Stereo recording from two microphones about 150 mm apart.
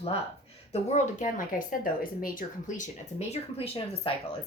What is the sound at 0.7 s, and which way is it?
Speech, 50° left (ahead or behind).